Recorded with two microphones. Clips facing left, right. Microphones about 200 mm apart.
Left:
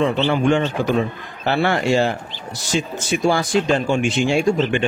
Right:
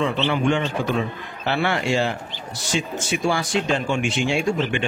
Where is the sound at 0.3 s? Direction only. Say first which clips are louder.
Left 4 dB; 40° left (ahead or behind).